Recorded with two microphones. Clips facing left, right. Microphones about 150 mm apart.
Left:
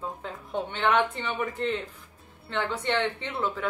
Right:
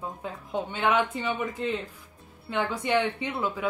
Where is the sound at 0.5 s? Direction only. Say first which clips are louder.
Even; 10° right (ahead or behind).